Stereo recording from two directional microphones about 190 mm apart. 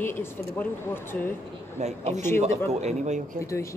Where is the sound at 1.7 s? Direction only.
35° right (ahead or behind).